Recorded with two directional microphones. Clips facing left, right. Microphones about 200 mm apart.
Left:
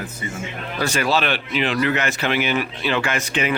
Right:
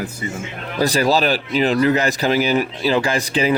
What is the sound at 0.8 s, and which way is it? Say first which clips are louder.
Speech: right 4 dB; 35° right (ahead or behind).